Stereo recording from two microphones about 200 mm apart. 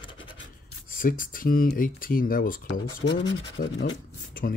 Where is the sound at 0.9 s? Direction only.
45° left (ahead or behind).